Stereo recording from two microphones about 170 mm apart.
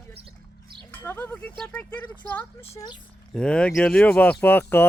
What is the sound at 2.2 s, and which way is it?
Speech, 10° left (ahead or behind).